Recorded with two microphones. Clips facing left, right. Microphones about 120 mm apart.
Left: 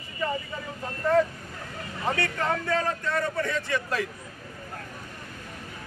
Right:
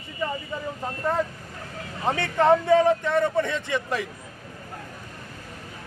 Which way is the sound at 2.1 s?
20° right (ahead or behind).